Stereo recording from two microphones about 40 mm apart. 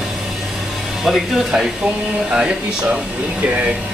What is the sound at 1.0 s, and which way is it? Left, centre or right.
Mantra, centre.